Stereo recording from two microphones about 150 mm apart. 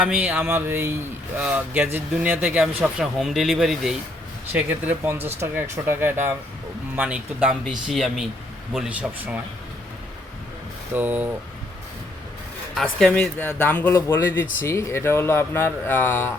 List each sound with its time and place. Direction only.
0.0 s a man's voice: 5° right (ahead or behind)
10.9 s a man's voice: 15° right (ahead or behind)
12.7 s speech: centre (ahead or behind)